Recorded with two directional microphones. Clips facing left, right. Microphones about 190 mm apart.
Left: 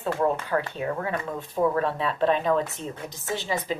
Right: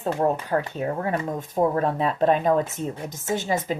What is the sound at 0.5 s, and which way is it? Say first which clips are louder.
Speech: right 2 dB; 35° right (ahead or behind).